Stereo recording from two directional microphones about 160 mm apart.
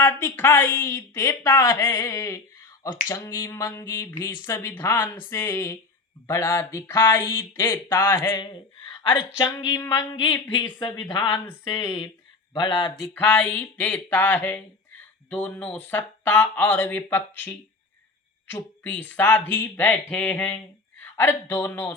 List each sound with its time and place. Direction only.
0.0 s speech: 15° left (ahead or behind)
8.9 s a woman's voice: 30° left (ahead or behind)
13.1 s speech: 10° left (ahead or behind)